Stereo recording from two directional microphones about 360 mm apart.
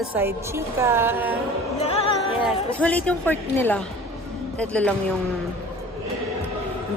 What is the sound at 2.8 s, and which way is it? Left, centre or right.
Speech, centre.